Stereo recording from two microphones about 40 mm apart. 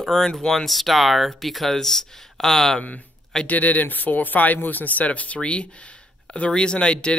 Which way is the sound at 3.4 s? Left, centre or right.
Left.